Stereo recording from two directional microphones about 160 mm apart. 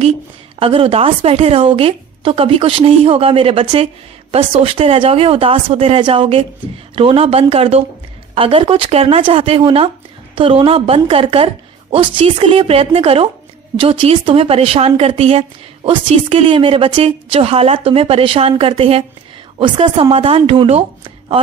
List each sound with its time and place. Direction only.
0.6 s speech: 35° right (ahead or behind)